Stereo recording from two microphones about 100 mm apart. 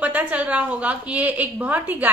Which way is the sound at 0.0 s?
15° right (ahead or behind).